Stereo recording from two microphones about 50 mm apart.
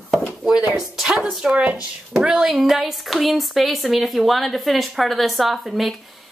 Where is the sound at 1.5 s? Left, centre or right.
Right.